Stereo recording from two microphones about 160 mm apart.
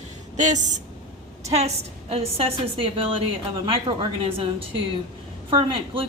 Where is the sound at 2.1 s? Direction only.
35° right (ahead or behind).